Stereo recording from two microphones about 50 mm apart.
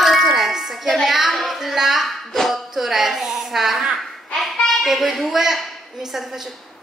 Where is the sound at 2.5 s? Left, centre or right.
Centre.